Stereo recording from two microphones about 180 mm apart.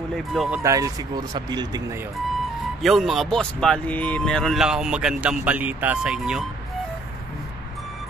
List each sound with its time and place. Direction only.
0.1 s speech: centre (ahead or behind)
0.6 s speech: 20° right (ahead or behind)
2.8 s speech: centre (ahead or behind)